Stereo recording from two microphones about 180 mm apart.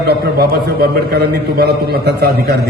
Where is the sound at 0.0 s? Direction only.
60° right (ahead or behind).